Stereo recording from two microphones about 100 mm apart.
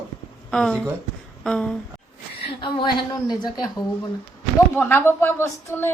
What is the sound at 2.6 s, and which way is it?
Speech, 50° left (ahead or behind).